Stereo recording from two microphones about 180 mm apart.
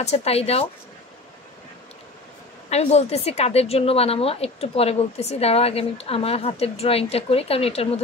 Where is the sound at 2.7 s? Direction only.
35° left (ahead or behind).